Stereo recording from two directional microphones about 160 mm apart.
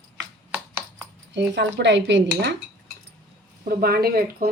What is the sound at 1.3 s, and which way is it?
Speech, 90° right.